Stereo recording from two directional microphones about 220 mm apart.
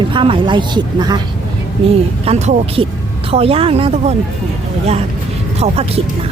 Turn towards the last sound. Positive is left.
turn(degrees=-30)  # may be behind; listen again after turning